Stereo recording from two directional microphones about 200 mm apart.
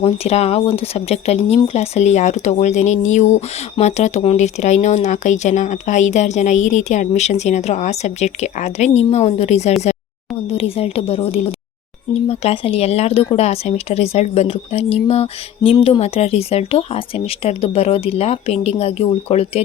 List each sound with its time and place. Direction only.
0.0 s speech: 30° left (ahead or behind)